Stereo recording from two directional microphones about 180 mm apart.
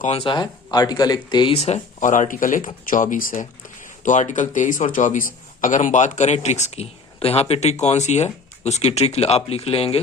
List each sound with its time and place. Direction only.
0.1 s a man's voice: 30° left (ahead or behind)